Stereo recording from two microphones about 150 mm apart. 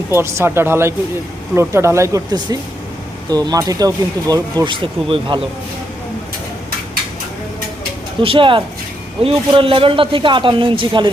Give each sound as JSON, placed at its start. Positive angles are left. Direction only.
{"t": 0.1, "sound": "speech", "side_deg": -15}
{"t": 8.2, "sound": "a man's voice", "side_deg": -35}